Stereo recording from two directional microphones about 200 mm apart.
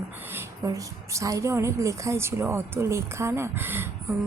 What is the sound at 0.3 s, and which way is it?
A woman's voice, 15° right (ahead or behind).